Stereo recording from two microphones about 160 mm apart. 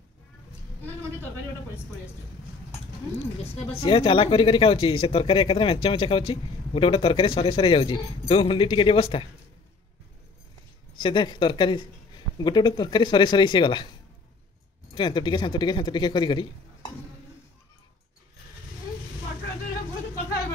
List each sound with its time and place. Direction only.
3.5 s speech: 35° left (ahead or behind)
11.0 s a man's voice: 30° left (ahead or behind)
15.0 s a man's voice: 30° left (ahead or behind)